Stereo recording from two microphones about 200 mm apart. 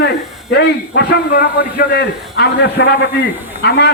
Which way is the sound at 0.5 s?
55° left (ahead or behind).